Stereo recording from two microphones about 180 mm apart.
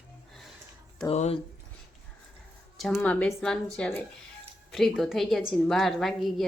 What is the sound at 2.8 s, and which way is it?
A woman's voice, 5° left (ahead or behind).